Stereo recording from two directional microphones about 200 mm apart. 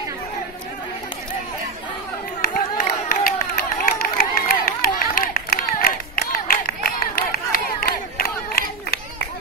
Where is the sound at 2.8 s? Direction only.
40° left (ahead or behind).